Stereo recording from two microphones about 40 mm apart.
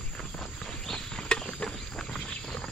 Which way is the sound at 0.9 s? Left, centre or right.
Left.